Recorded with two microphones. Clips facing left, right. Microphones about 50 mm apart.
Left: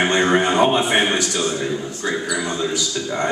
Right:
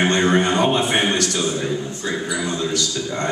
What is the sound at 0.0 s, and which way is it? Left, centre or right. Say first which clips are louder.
A man's voice: even; centre.